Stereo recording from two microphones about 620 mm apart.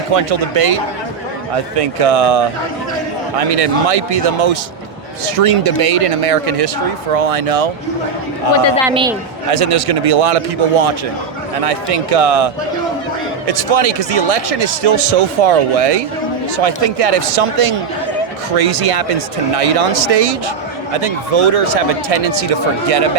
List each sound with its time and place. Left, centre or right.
0.1 s speech: right
8.9 s a man's voice: centre
9.5 s speech: right
13.5 s speech: right